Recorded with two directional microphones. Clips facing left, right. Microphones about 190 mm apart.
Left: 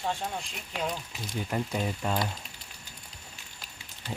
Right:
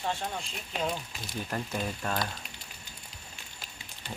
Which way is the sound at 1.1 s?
15° left (ahead or behind).